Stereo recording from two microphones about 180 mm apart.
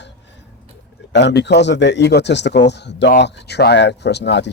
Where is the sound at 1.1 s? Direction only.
75° left (ahead or behind).